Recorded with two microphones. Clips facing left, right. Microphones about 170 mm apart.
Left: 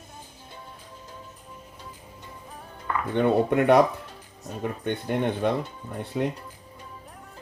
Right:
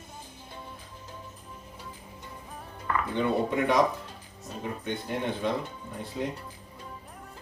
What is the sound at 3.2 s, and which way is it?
Speech, 60° left (ahead or behind).